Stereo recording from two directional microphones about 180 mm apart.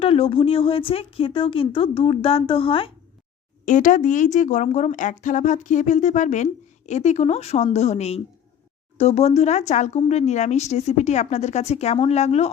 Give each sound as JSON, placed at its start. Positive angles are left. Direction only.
{"t": 0.0, "sound": "speech", "side_deg": 30}
{"t": 3.7, "sound": "speech", "side_deg": 45}